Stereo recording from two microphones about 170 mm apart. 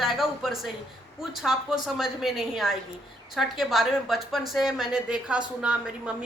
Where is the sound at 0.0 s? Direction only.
Centre (ahead or behind).